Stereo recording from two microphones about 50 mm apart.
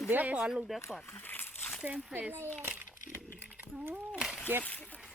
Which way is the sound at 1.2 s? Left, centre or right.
Left.